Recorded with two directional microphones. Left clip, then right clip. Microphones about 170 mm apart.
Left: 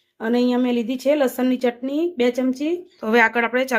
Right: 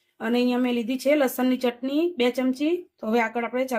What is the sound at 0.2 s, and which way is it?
Speech, centre (ahead or behind).